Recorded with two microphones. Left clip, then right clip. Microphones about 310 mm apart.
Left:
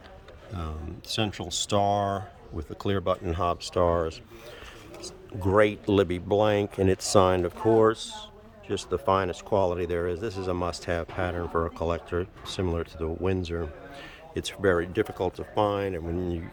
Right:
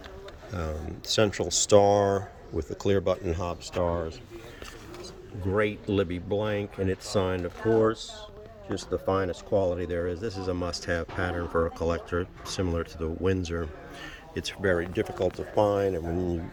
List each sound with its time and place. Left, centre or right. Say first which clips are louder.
0.5 s speech: right 4 dB; centre
3.5 s speech: left 6 dB; left
5.5 s speech: left 5 dB; centre